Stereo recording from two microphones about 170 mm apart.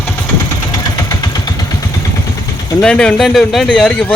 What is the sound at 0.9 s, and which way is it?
Vehicle, 20° left (ahead or behind).